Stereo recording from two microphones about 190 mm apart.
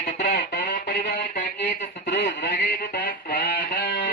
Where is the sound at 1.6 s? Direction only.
70° left (ahead or behind).